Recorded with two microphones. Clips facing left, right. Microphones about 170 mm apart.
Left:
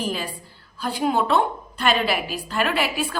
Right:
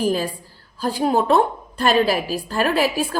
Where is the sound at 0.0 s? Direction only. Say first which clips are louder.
Right 7 dB; 40° right (ahead or behind).